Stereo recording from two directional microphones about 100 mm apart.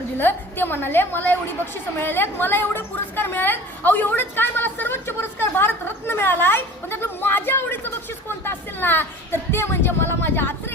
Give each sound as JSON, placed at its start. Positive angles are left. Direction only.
{"t": 0.2, "sound": "a woman's voice", "side_deg": 20}